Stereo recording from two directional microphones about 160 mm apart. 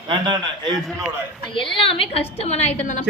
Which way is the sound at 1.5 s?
30° left (ahead or behind).